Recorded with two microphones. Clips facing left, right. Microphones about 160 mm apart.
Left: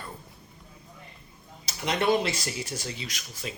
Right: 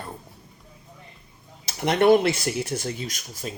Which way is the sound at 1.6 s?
55° right (ahead or behind).